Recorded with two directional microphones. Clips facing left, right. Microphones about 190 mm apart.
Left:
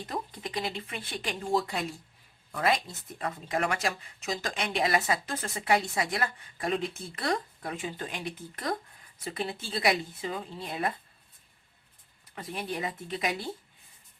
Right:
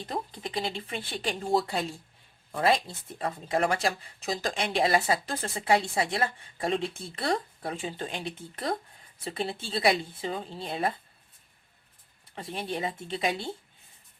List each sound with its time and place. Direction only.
0.0 s speech: 30° right (ahead or behind)
12.3 s speech: 30° right (ahead or behind)